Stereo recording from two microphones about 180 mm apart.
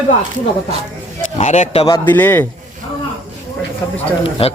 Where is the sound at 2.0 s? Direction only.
10° left (ahead or behind).